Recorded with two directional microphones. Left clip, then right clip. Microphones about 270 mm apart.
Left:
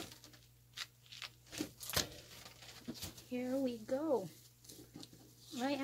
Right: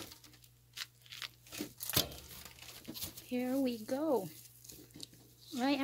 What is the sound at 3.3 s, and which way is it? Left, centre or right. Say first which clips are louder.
Speech: right 3 dB; right.